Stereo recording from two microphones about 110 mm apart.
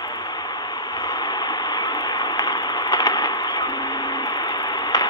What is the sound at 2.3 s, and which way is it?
Vehicle, 35° left (ahead or behind).